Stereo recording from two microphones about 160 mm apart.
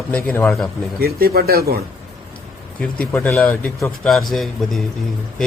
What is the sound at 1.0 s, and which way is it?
Speech, 75° right (ahead or behind).